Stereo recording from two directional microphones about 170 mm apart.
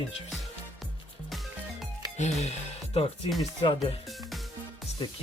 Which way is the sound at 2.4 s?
35° left (ahead or behind).